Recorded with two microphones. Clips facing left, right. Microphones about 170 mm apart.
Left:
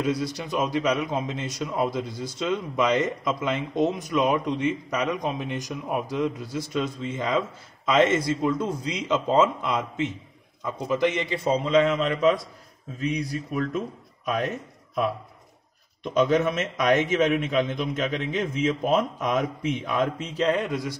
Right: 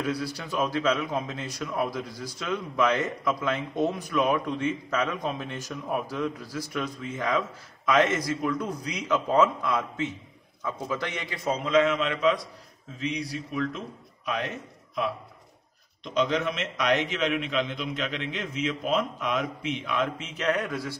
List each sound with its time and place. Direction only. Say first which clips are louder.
0.0 s a man's voice: left 4 dB; 20° left (ahead or behind); by 12.4 s 35° left (ahead or behind)
13.0 s a man's voice: left 3 dB; 50° left (ahead or behind)
16.0 s a man's voice: left 5 dB; 50° left (ahead or behind); by 21.0 s 20° left (ahead or behind)